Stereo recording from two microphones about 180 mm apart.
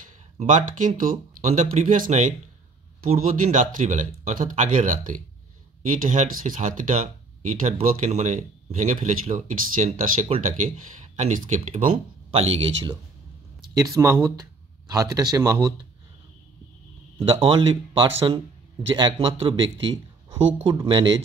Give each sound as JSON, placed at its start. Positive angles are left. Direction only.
{"t": 0.0, "sound": "speech", "side_deg": -45}
{"t": 13.7, "sound": "speech", "side_deg": -20}
{"t": 17.2, "sound": "a man's voice", "side_deg": -30}